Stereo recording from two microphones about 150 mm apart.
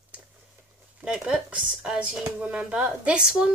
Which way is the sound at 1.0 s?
5° right (ahead or behind).